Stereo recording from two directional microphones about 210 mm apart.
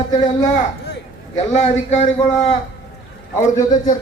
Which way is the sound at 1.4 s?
30° left (ahead or behind).